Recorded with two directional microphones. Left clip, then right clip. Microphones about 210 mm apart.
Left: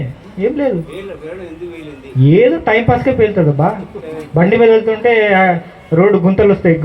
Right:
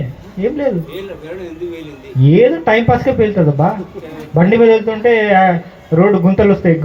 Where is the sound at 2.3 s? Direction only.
20° left (ahead or behind).